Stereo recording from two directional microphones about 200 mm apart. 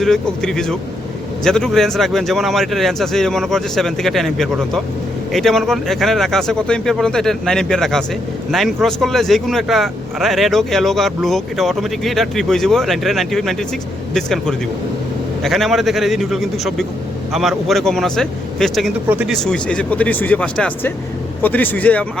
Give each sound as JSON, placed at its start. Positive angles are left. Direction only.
{"t": 0.0, "sound": "speech", "side_deg": 5}
{"t": 19.0, "sound": "speech", "side_deg": -10}
{"t": 19.3, "sound": "speech", "side_deg": 5}